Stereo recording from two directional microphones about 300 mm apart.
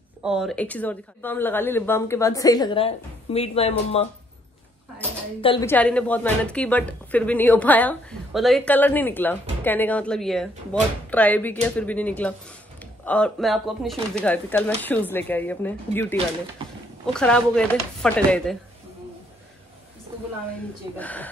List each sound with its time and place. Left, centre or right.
0.2 s speech: centre
5.4 s speech: centre
5.7 s a woman's voice: centre
21.0 s a woman's voice: centre